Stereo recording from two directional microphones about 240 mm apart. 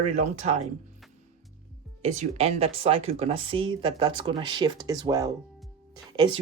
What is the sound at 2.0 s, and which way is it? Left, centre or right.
Speech, right.